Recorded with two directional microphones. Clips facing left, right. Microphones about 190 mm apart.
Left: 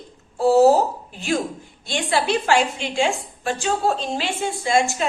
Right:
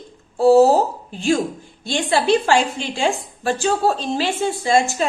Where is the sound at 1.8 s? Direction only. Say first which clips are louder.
Right 3 dB; 30° right (ahead or behind).